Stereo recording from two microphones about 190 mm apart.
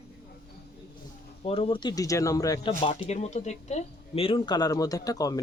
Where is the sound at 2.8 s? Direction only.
35° left (ahead or behind); by 5.4 s 20° left (ahead or behind).